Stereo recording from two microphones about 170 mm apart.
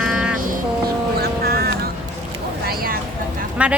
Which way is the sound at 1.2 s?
65° right (ahead or behind).